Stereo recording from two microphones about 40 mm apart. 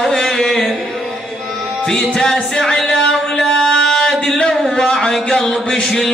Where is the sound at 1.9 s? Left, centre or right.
Centre.